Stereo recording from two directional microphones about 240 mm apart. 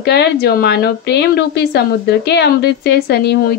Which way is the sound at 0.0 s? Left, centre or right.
Left.